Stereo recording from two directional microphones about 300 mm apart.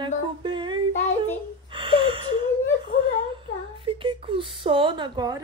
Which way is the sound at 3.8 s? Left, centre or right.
Centre.